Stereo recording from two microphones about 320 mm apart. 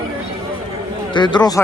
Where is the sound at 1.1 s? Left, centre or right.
Centre.